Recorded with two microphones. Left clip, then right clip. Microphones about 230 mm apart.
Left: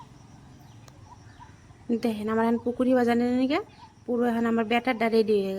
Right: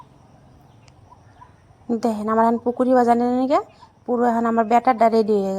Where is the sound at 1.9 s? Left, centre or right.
Centre.